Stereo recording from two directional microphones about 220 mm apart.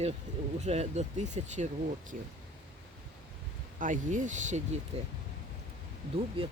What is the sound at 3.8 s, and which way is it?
Speech, 35° right (ahead or behind).